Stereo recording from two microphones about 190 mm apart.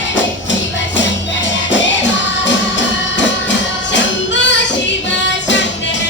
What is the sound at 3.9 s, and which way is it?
Music, 70° left (ahead or behind).